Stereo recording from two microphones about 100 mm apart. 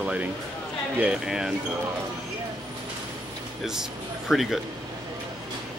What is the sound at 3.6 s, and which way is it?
Speech, 5° right (ahead or behind).